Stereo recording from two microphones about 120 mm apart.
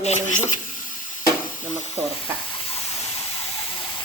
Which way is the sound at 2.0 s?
60° right (ahead or behind).